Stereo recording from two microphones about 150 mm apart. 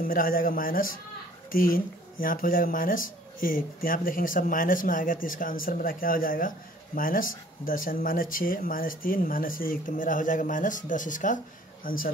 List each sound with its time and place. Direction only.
0.0 s speech: 70° left (ahead or behind)